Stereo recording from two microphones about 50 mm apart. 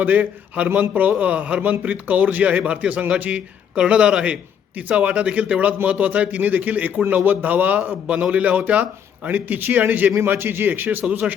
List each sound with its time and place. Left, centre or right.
0.0 s a man's voice: right
10.2 s a man's voice: right